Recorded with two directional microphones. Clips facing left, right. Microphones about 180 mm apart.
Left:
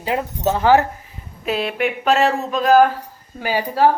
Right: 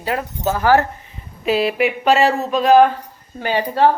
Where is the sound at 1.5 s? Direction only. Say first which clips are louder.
Right 4 dB; 5° right (ahead or behind).